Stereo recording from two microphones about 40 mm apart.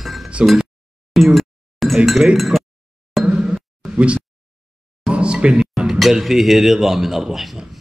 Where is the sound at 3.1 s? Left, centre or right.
Centre.